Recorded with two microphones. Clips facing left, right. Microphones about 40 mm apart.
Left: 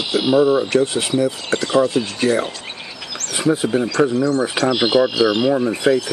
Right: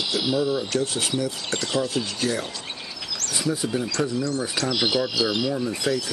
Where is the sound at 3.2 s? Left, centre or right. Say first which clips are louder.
Left 8 dB; left.